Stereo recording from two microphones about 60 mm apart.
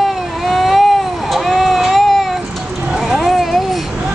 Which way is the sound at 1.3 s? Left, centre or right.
Centre.